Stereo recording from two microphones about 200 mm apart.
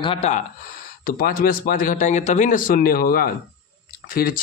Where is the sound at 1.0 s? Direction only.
45° left (ahead or behind).